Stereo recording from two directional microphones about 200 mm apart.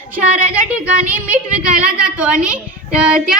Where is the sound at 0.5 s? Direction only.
5° right (ahead or behind).